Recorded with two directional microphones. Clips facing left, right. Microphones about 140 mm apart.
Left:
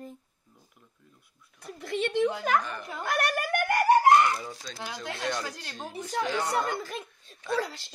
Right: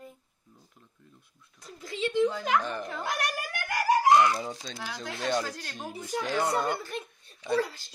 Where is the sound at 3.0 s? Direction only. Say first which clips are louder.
Left 7 dB; 55° left (ahead or behind).